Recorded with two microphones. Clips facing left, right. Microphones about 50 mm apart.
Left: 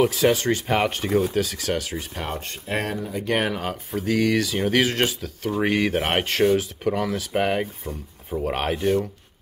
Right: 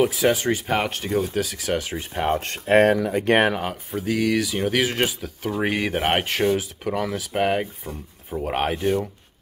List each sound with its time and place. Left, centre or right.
0.0 s speech: centre
1.8 s speech: right
2.3 s speech: right
3.9 s speech: centre